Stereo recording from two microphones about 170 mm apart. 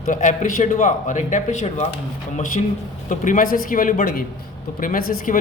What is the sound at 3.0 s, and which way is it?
A man's voice, 50° left (ahead or behind).